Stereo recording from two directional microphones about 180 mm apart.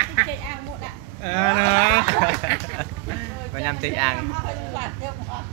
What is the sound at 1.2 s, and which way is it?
Cattle, 45° left (ahead or behind).